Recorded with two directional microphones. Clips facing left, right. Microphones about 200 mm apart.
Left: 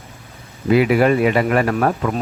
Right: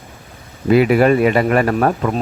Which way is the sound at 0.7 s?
45° right (ahead or behind).